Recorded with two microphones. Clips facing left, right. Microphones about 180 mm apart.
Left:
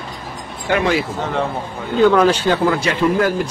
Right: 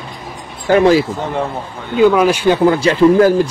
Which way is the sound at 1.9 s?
10° right (ahead or behind).